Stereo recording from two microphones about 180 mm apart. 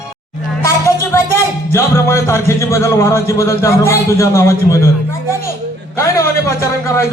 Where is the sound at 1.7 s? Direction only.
15° left (ahead or behind).